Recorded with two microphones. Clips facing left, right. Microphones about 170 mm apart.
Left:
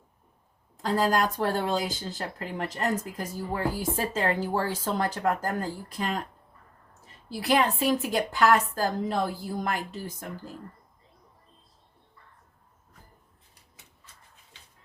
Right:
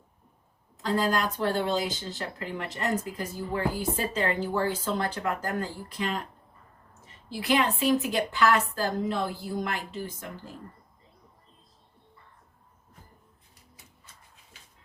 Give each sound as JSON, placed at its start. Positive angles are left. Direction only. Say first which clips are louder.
{"t": 0.8, "sound": "speech", "louder": "left 2 dB", "side_deg": 45}